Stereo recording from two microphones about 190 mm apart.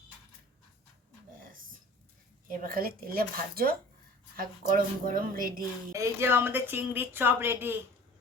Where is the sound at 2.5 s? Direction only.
50° right (ahead or behind).